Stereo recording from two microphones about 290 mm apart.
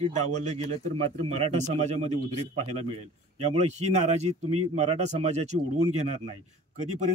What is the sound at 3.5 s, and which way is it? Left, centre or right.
Speech, right.